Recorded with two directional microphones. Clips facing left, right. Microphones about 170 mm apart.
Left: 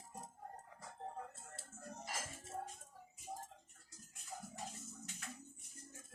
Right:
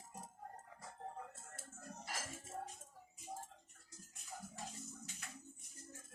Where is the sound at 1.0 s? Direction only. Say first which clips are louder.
Left 1 dB; 25° left (ahead or behind).